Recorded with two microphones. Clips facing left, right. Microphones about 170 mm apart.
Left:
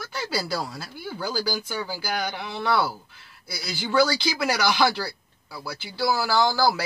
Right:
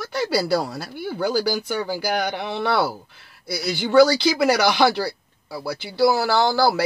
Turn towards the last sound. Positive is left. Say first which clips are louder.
# right 3 dB
turn(degrees=-60)  # may be behind; listen again after turning